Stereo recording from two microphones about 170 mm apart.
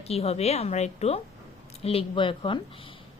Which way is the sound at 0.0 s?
35° left (ahead or behind).